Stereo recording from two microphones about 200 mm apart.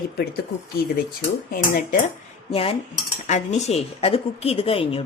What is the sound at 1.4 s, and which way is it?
Speech, 45° left (ahead or behind).